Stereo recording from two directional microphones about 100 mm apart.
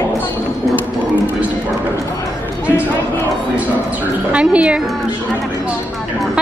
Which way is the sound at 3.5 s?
15° right (ahead or behind).